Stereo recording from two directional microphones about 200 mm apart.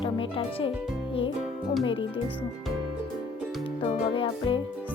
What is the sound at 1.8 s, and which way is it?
Speech, 25° left (ahead or behind).